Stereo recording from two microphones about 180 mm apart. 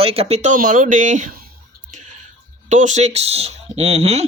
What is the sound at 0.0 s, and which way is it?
Speech, 35° right (ahead or behind).